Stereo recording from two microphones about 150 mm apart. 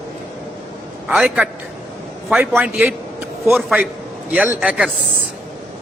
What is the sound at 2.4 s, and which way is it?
Speech, 15° right (ahead or behind).